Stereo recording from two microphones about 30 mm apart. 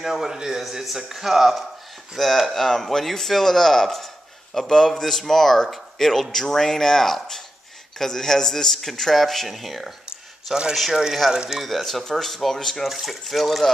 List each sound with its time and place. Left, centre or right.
0.0 s a man's voice: centre
0.8 s a man's voice: centre
2.1 s speech: centre
4.6 s speech: left; by 9.8 s centre
10.5 s a man's voice: right
11.6 s speech: centre
12.8 s speech: centre